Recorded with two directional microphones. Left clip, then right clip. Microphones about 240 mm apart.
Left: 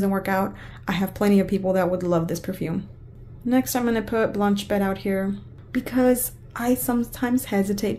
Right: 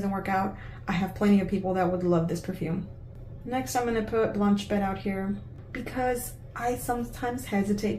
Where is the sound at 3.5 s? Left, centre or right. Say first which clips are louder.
Left 5 dB; left.